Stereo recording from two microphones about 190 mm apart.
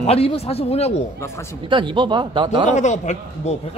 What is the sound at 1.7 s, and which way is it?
Speech, 25° right (ahead or behind).